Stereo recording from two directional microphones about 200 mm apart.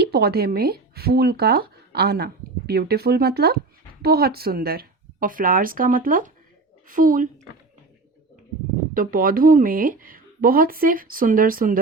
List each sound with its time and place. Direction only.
0.0 s speech: 55° right (ahead or behind)
9.0 s speech: 45° right (ahead or behind)